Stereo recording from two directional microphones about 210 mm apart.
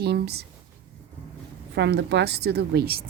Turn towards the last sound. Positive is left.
turn(degrees=-45)  # may be behind; listen again after turning